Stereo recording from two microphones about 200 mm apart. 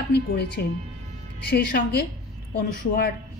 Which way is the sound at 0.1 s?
55° left (ahead or behind).